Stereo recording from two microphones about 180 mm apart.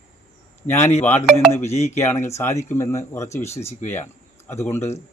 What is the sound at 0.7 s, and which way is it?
Speech, 35° left (ahead or behind).